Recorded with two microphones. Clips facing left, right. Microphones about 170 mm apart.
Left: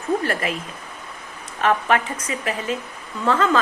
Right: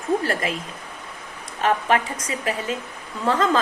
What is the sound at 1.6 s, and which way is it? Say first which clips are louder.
A woman's voice: left 1 dB; 30° right (ahead or behind).